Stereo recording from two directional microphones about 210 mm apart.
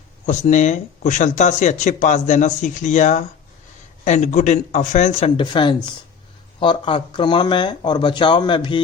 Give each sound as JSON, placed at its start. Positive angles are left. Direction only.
{"t": 0.3, "sound": "speech", "side_deg": 35}
{"t": 5.4, "sound": "speech", "side_deg": 20}